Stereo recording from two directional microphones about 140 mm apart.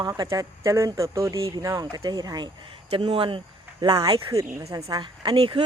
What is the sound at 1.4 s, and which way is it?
Speech, 40° right (ahead or behind).